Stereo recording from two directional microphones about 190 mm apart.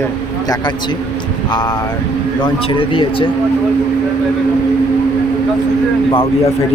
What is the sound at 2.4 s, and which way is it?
Speech, 30° left (ahead or behind).